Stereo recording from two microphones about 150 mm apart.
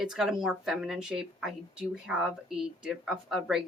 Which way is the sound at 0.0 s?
5° right (ahead or behind).